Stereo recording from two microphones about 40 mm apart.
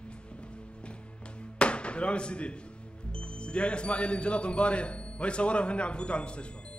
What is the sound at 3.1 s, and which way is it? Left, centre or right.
A man's voice, left.